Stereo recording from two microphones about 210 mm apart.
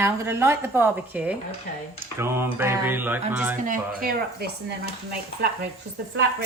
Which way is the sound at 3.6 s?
40° right (ahead or behind).